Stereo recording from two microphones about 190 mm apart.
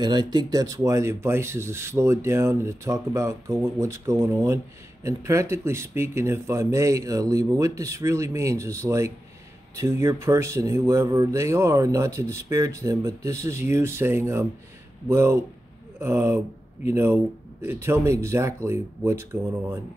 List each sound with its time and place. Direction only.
0.0 s speech: 20° right (ahead or behind)